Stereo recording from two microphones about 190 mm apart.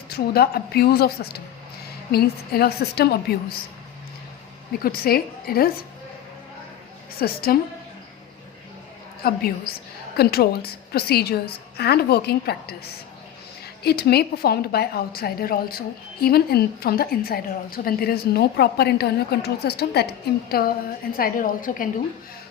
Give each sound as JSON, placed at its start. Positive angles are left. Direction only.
{"t": 0.1, "sound": "a woman's voice", "side_deg": 55}
{"t": 4.8, "sound": "a woman's voice", "side_deg": 50}
{"t": 7.2, "sound": "a woman's voice", "side_deg": 55}
{"t": 9.2, "sound": "a woman's voice", "side_deg": 55}
{"t": 13.8, "sound": "a woman's voice", "side_deg": 55}